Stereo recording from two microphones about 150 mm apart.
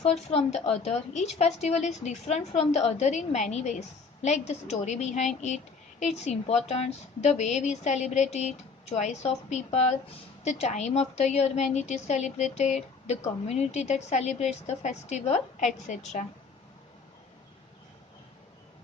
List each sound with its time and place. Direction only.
0.0 s a woman's voice: 45° left (ahead or behind)